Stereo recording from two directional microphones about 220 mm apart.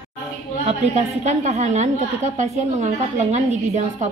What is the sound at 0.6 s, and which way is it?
A woman's voice, 30° right (ahead or behind).